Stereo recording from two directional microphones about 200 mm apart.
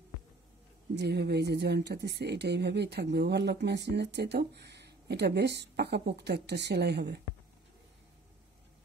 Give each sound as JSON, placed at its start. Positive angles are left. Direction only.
{"t": 0.9, "sound": "speech", "side_deg": -55}